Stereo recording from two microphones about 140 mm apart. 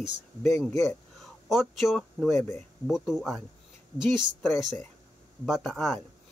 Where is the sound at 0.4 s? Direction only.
20° left (ahead or behind).